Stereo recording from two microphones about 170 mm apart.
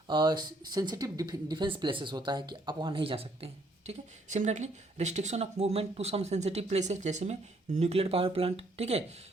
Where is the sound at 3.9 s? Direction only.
45° right (ahead or behind).